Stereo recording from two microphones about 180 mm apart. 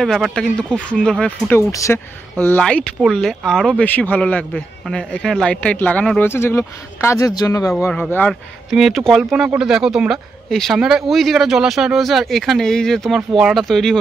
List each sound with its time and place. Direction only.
0.0 s speech: centre (ahead or behind)
1.7 s speech: 20° left (ahead or behind)
2.4 s speech: 5° left (ahead or behind)
8.1 s speech: 5° left (ahead or behind)